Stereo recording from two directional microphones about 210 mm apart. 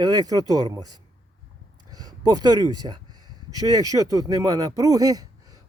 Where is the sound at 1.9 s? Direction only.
20° right (ahead or behind).